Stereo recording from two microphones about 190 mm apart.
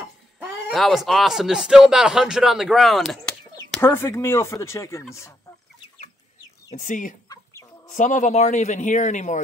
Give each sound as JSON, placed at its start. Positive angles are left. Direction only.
{"t": 0.4, "sound": "speech", "side_deg": 0}
{"t": 3.7, "sound": "speech", "side_deg": 10}
{"t": 6.7, "sound": "speech", "side_deg": 45}